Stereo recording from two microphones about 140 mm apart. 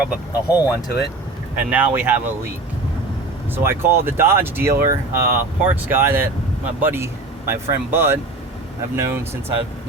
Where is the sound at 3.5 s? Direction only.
15° right (ahead or behind).